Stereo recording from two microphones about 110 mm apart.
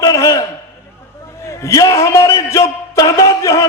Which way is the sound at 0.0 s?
30° left (ahead or behind).